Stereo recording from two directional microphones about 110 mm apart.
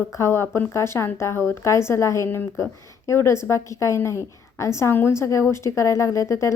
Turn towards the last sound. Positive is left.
turn(degrees=25)  # may be behind; listen again after turning